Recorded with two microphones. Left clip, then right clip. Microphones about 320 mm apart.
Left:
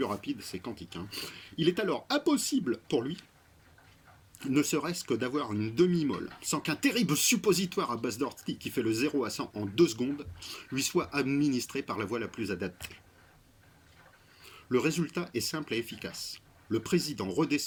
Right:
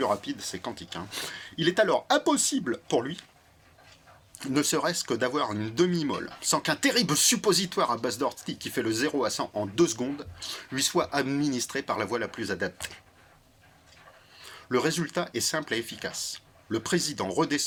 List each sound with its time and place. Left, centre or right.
0.3 s speech: centre
4.4 s speech: centre
14.5 s speech: centre